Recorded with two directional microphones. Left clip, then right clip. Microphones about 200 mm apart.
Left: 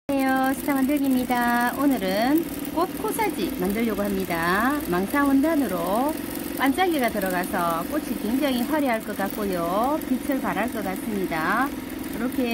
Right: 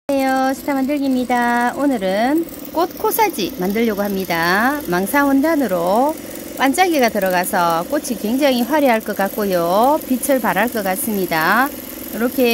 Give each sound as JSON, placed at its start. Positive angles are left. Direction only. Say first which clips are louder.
{"t": 0.1, "sound": "speech", "louder": "right 6 dB", "side_deg": -45}